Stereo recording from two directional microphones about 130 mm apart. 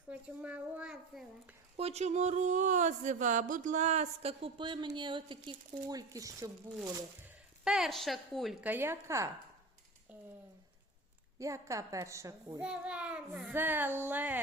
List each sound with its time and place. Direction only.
0.1 s child singing: 10° right (ahead or behind)
1.7 s speech: 55° right (ahead or behind); by 6.5 s 30° right (ahead or behind)
7.6 s a woman's voice: 5° right (ahead or behind)
8.6 s a woman's voice: 15° right (ahead or behind)
11.3 s a woman's voice: 25° right (ahead or behind)
12.5 s child singing: 10° right (ahead or behind)